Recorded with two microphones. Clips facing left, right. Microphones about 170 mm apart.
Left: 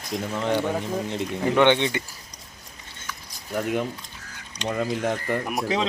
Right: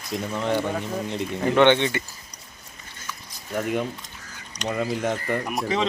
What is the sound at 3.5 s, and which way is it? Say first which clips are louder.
Speech: even; centre (ahead or behind).